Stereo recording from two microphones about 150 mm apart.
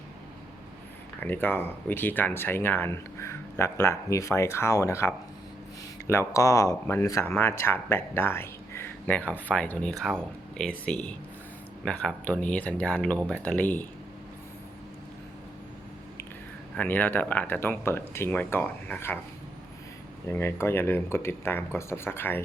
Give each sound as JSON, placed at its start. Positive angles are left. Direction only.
{"t": 1.2, "sound": "speech", "side_deg": 15}
{"t": 16.7, "sound": "speech", "side_deg": 10}
{"t": 20.3, "sound": "speech", "side_deg": 15}